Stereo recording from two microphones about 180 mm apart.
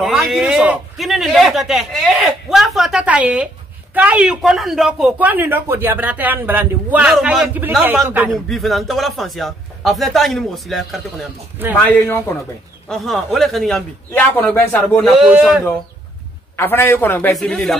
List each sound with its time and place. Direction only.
0.0 s a man's voice: centre (ahead or behind)
8.5 s a man's voice: centre (ahead or behind)
11.9 s a man's voice: 10° left (ahead or behind); by 15.4 s 5° right (ahead or behind)
16.5 s a man's voice: 15° left (ahead or behind)